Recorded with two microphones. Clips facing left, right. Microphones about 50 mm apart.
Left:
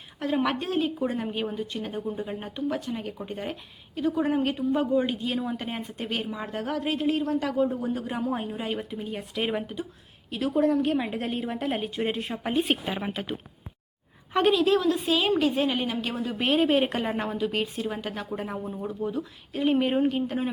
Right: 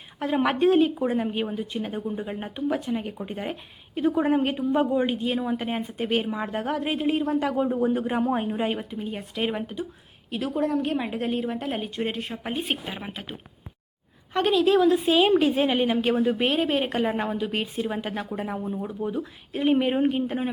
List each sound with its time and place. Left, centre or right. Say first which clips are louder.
0.2 s a woman's voice: right 4 dB; centre
1.0 s a woman's voice: right 3 dB; centre
3.9 s a woman's voice: right 3 dB; right
8.8 s a woman's voice: right 1 dB; centre
14.3 s a woman's voice: right 1 dB; centre; by 16.4 s right
16.4 s a woman's voice: left 1 dB; centre